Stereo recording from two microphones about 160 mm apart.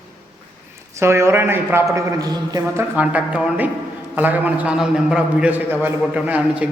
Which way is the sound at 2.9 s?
10° right (ahead or behind).